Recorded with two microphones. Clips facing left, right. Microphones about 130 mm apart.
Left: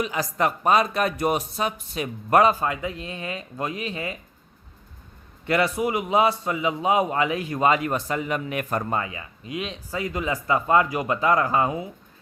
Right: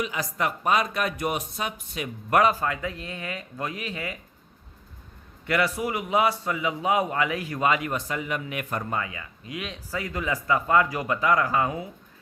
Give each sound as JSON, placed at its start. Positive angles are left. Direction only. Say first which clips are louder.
{"t": 0.0, "sound": "speech", "louder": "left 4 dB", "side_deg": 35}
{"t": 5.5, "sound": "a man's voice", "louder": "left 3 dB", "side_deg": 25}